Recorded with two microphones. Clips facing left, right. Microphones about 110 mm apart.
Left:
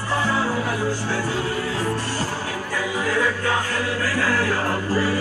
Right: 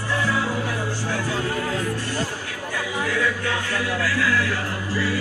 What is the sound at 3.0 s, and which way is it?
Music, 40° left (ahead or behind).